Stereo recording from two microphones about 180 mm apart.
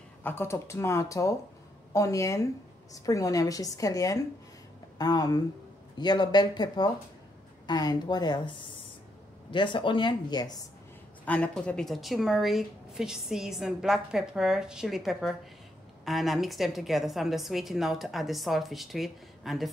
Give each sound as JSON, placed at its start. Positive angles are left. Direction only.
{"t": 0.2, "sound": "a woman's voice", "side_deg": 10}
{"t": 11.2, "sound": "a woman's voice", "side_deg": 5}